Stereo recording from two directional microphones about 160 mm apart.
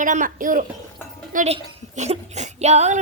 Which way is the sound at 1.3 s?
45° right (ahead or behind).